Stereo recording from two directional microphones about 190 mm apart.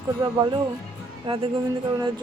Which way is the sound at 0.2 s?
25° right (ahead or behind).